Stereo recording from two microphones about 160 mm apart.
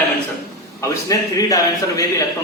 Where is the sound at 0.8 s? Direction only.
20° left (ahead or behind).